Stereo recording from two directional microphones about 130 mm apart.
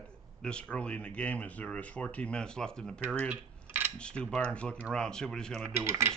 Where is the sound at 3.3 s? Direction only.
15° right (ahead or behind).